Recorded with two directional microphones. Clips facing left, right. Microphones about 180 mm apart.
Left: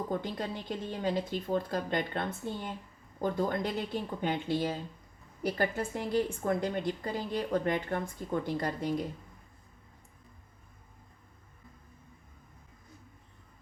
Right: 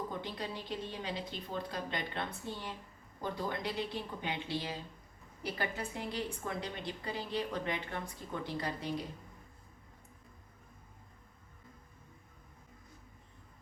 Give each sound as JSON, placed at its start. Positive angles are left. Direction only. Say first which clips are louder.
{"t": 0.1, "sound": "a woman's voice", "louder": "left 6 dB", "side_deg": 50}